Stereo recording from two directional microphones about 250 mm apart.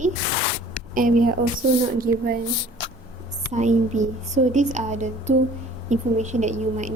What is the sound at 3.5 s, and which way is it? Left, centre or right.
Speech, right.